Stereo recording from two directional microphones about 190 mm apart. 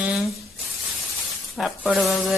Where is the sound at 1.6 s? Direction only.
Centre (ahead or behind).